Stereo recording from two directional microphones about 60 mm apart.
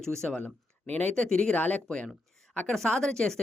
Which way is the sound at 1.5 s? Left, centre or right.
Left.